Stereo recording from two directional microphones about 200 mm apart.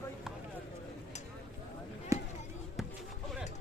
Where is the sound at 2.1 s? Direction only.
15° right (ahead or behind).